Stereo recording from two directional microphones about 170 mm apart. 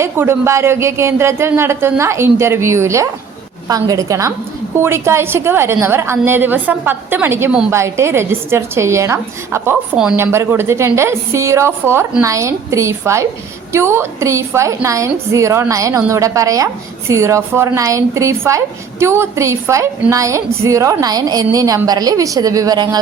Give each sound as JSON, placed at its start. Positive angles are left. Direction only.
{"t": 0.0, "sound": "a woman's voice", "side_deg": -15}